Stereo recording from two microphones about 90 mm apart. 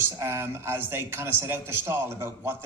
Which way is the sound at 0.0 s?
30° right (ahead or behind).